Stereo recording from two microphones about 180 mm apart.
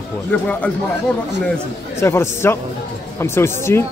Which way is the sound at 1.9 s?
15° left (ahead or behind).